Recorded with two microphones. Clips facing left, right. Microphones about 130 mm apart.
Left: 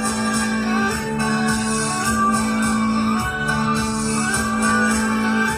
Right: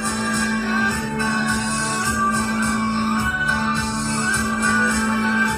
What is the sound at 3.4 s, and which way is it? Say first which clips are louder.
Music: left 2 dB; 35° left (ahead or behind).